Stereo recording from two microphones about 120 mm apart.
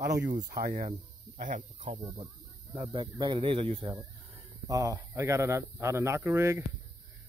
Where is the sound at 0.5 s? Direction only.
90° right.